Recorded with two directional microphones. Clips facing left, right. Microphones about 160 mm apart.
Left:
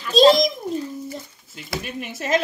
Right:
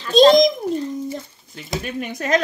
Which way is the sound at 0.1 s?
Centre (ahead or behind).